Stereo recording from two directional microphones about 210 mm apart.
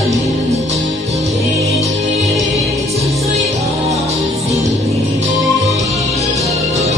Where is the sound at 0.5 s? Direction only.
30° right (ahead or behind).